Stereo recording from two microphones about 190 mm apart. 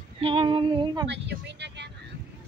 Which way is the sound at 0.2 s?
30° right (ahead or behind).